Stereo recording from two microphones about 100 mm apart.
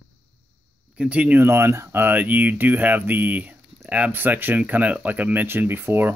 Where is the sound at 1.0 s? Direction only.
15° right (ahead or behind).